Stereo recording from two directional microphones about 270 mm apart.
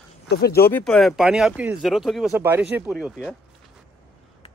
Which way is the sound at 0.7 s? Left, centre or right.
Centre.